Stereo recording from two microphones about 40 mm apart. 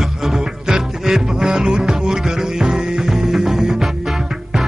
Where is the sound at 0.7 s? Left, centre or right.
Centre.